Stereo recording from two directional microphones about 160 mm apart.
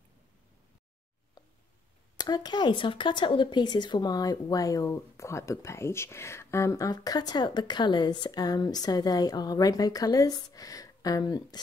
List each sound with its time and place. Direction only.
2.1 s speech: 25° left (ahead or behind)